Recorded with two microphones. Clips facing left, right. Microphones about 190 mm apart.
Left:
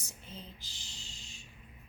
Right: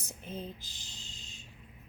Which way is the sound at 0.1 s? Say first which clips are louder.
Right 9 dB; 55° right (ahead or behind).